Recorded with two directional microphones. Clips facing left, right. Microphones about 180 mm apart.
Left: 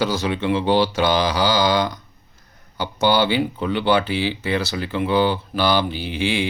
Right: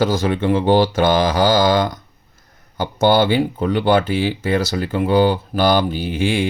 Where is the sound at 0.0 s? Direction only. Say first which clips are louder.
Right 4 dB; 50° right (ahead or behind).